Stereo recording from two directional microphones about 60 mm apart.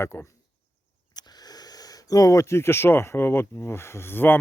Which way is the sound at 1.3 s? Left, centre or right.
Left.